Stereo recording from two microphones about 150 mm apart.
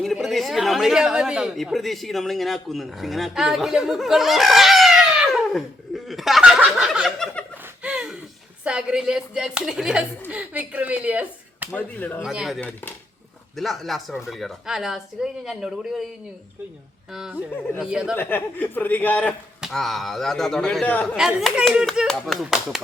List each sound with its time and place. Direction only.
0.0 s a man's voice: centre (ahead or behind)
7.8 s a sound: 5° right (ahead or behind)
8.6 s a woman's voice: 5° right (ahead or behind)
11.7 s speech: 10° left (ahead or behind)
12.2 s a man's voice: 5° right (ahead or behind)
12.5 s a man's voice: 10° left (ahead or behind)
17.1 s a man's voice: 5° right (ahead or behind)
17.5 s speech: 15° left (ahead or behind)
17.9 s a man's voice: 5° right (ahead or behind)
18.2 s speech: 15° left (ahead or behind)
19.6 s a man's voice: centre (ahead or behind)
21.2 s a man's voice: 5° right (ahead or behind)